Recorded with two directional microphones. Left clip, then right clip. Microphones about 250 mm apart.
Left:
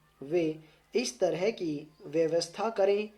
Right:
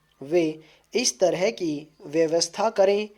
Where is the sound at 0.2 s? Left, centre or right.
Right.